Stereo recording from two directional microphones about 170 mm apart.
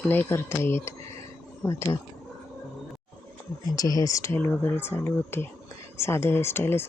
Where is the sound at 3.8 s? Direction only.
20° left (ahead or behind).